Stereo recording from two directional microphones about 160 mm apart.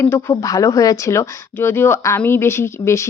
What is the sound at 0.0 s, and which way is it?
Speech, 15° left (ahead or behind).